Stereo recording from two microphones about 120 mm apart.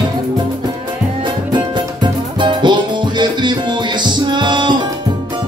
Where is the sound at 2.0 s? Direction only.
40° right (ahead or behind).